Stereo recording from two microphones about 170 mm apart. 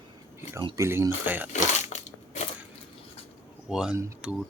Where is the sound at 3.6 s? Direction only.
5° right (ahead or behind).